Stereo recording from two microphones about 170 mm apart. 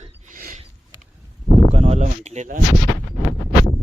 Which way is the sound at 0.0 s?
50° right (ahead or behind).